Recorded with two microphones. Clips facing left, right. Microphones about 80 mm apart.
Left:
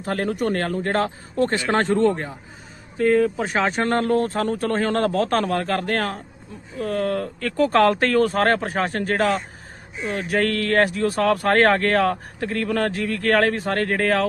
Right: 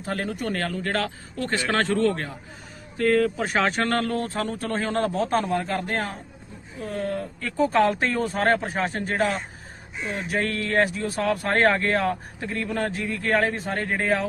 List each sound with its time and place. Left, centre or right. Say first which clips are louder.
0.0 s speech: left 5 dB; left
3.0 s speech: left 3 dB; centre
3.8 s speech: left 3 dB; left
4.0 s a man's voice: left 6 dB; left